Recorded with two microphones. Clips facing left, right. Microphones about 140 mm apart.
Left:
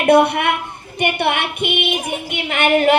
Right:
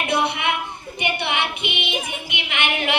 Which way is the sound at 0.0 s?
55° left (ahead or behind).